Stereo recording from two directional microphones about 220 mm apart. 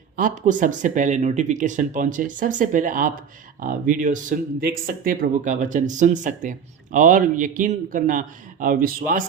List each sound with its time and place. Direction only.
0.2 s speech: 35° right (ahead or behind)